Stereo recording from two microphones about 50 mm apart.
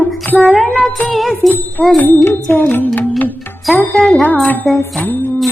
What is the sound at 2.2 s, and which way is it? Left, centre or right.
Music, left.